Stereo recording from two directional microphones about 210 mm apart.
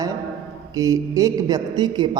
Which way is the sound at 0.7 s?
15° right (ahead or behind).